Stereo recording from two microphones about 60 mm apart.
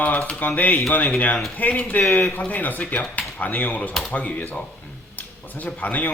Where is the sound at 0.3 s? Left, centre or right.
Left.